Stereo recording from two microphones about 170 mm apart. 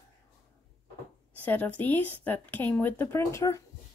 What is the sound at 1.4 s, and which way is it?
A woman's voice, 10° left (ahead or behind).